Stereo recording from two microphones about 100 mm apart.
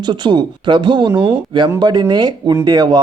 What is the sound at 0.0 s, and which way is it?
Speech, 45° right (ahead or behind).